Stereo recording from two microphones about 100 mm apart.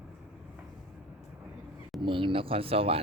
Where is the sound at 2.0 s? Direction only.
55° right (ahead or behind); by 3.0 s 70° right (ahead or behind).